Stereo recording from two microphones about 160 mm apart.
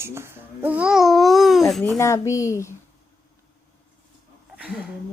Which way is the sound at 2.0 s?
20° left (ahead or behind).